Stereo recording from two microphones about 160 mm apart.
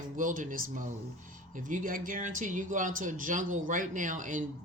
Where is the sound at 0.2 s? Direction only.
55° right (ahead or behind).